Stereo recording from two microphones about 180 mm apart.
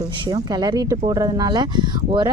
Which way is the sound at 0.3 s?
20° right (ahead or behind).